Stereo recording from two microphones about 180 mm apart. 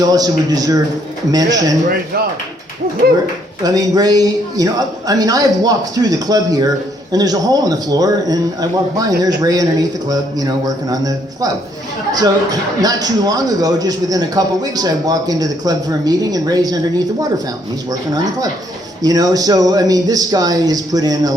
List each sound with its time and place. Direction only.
0.0 s a man's voice: 20° right (ahead or behind)
3.6 s a man's voice: 20° right (ahead or behind)
19.0 s a man's voice: 20° right (ahead or behind)